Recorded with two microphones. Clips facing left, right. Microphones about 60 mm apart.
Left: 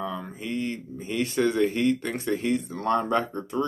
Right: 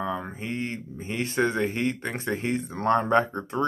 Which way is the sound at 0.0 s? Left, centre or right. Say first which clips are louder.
Right 2 dB; right.